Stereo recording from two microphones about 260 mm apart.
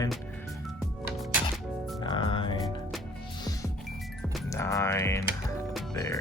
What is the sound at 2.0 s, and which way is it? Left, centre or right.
Music, centre.